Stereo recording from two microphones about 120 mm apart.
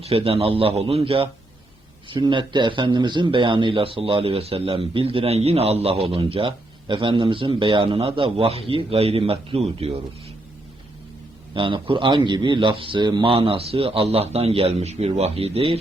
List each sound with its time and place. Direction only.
0.0 s a man's voice: 55° right (ahead or behind)
11.5 s a man's voice: 45° right (ahead or behind)